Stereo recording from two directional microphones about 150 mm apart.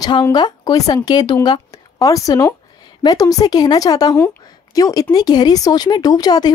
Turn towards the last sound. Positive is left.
turn(degrees=25)  # may be behind; listen again after turning